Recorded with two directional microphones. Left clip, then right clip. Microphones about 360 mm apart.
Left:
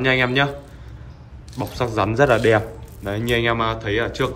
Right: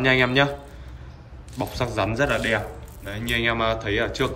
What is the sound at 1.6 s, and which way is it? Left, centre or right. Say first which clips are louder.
A man's voice: left 3 dB; centre.